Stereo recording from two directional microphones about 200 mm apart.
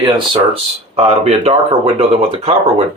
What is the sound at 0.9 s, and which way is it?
Speech, 30° right (ahead or behind).